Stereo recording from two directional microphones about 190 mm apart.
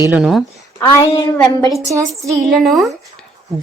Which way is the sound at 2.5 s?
Centre (ahead or behind).